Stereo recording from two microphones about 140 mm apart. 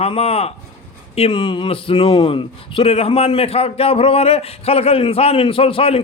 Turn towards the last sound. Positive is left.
turn(degrees=40)  # may be behind; listen again after turning